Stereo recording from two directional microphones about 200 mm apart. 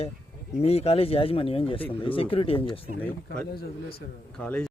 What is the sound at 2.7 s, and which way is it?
Speech, 5° left (ahead or behind).